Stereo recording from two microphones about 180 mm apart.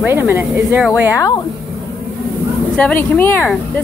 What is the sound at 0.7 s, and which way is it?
Speech, centre (ahead or behind).